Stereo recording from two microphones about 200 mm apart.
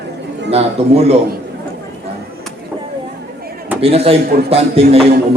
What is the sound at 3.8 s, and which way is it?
A man's voice, 30° right (ahead or behind).